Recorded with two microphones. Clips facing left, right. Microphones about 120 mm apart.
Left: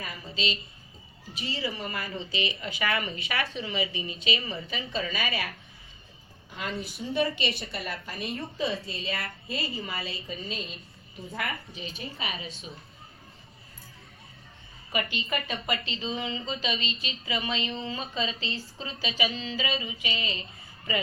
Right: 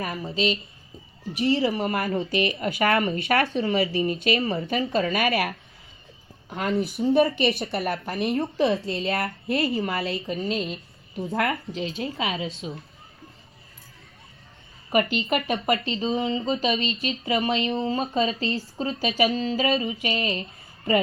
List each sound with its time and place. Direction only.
0.0 s speech: 60° right (ahead or behind)
1.4 s a woman's voice: 65° right (ahead or behind)
11.3 s speech: 85° right
14.9 s a woman's voice: 55° right (ahead or behind); by 16.4 s 35° right (ahead or behind)
16.5 s speech: 50° right (ahead or behind)